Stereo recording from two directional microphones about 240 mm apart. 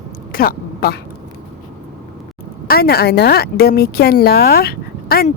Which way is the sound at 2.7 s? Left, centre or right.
Left.